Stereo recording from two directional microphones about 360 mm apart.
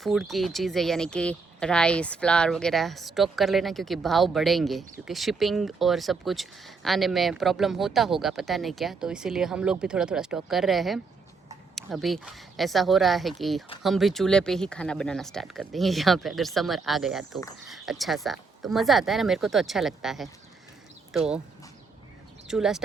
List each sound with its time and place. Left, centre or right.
0.0 s speech: centre
22.4 s speech: centre